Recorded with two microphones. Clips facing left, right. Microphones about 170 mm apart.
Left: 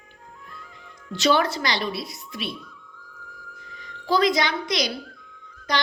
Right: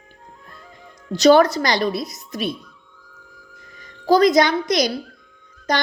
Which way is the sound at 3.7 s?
45° right (ahead or behind).